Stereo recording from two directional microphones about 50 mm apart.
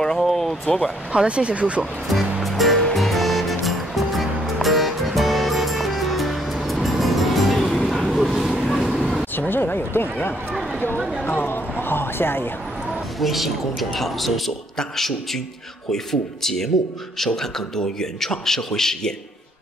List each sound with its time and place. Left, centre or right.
0.0 s a sound: centre
0.7 s speech: centre
1.1 s speech: right
1.8 s music: centre
8.0 s a sound: centre
8.6 s vehicle: centre
9.5 s speech: left
11.0 s a woman's voice: centre
11.2 s speech: left
13.2 s a woman's voice: centre